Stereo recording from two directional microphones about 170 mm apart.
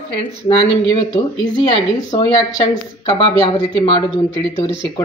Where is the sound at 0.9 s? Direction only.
25° left (ahead or behind).